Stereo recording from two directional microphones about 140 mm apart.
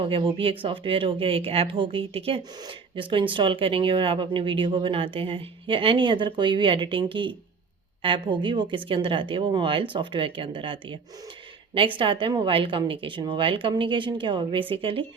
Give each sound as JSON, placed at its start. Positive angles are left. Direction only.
{"t": 0.0, "sound": "speech", "side_deg": -40}